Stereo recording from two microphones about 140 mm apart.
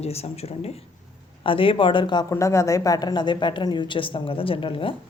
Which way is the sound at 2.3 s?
20° left (ahead or behind).